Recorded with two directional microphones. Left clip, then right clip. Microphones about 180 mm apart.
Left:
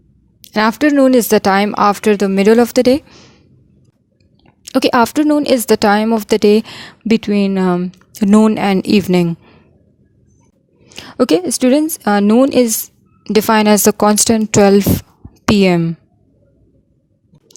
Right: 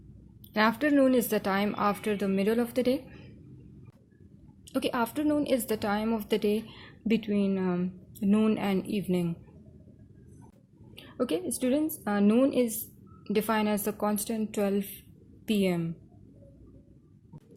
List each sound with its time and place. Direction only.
0.5 s speech: 60° left (ahead or behind)
4.6 s speech: 60° left (ahead or behind)
10.9 s speech: 55° left (ahead or behind)